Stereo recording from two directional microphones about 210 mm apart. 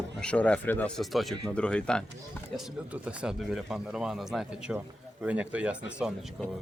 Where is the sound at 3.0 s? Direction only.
5° right (ahead or behind).